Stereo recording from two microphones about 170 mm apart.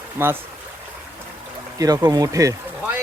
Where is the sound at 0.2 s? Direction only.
10° right (ahead or behind).